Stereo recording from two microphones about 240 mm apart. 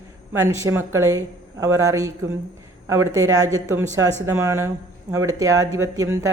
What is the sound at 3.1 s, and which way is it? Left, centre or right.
A man's voice, centre.